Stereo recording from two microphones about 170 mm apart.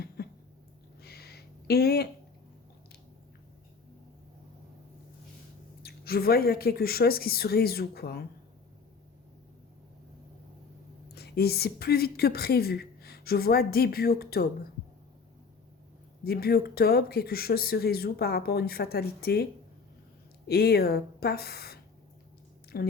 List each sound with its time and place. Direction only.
0.2 s a sound: 65° left (ahead or behind)
5.8 s speech: 65° left (ahead or behind)
11.1 s a woman's voice: 70° left (ahead or behind)
16.2 s speech: 65° left (ahead or behind)
20.5 s speech: 65° left (ahead or behind)